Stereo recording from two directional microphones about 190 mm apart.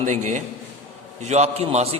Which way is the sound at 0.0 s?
40° right (ahead or behind).